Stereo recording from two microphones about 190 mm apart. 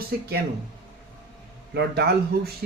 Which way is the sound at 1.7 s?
60° right (ahead or behind).